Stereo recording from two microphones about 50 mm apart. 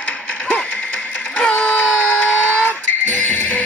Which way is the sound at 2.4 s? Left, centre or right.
Left.